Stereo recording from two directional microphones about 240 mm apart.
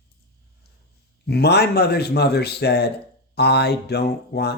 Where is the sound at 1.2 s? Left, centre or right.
Left.